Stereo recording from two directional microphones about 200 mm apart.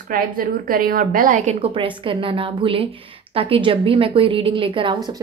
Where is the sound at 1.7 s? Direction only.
25° right (ahead or behind).